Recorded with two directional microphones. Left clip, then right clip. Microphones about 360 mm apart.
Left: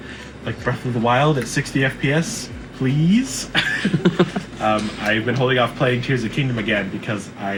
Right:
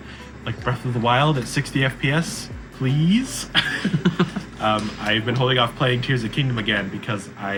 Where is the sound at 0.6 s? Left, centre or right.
Centre.